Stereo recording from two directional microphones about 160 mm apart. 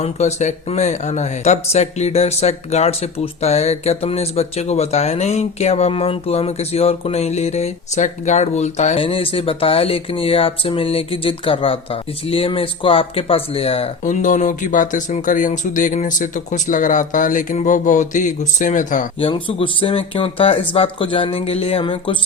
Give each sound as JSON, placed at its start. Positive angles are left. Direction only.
{"t": 0.0, "sound": "speech", "side_deg": 45}
{"t": 14.0, "sound": "speech", "side_deg": 50}
{"t": 19.2, "sound": "speech", "side_deg": 35}